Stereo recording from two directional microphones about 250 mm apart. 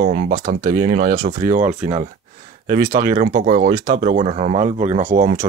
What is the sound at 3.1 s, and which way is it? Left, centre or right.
Speech, right.